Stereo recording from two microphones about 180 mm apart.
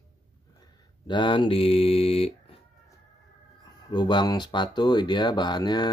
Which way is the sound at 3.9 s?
25° left (ahead or behind).